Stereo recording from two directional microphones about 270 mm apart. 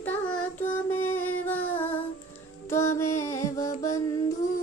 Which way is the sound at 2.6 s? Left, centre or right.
Centre.